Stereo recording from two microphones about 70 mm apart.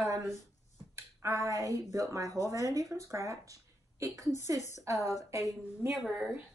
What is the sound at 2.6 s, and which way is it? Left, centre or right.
Speech, left.